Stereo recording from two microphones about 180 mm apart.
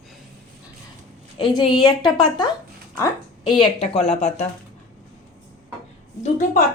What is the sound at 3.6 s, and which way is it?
Speech, 30° left (ahead or behind).